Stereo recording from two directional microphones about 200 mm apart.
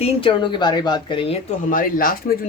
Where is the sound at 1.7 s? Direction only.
45° left (ahead or behind).